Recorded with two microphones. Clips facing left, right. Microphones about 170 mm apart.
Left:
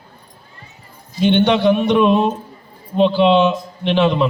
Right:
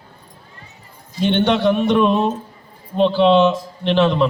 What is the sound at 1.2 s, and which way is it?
Speech, centre (ahead or behind).